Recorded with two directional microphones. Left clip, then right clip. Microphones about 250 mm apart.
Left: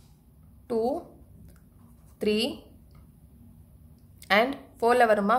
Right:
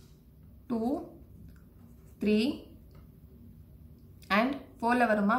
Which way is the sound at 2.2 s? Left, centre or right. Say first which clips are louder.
Left 3 dB; left.